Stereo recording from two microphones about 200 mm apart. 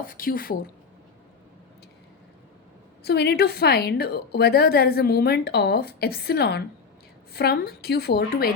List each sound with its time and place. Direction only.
0.0 s a woman's voice: 45° left (ahead or behind)
3.0 s a woman's voice: 55° left (ahead or behind)